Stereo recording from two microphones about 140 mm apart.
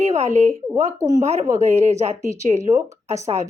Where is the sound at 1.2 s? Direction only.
55° right (ahead or behind).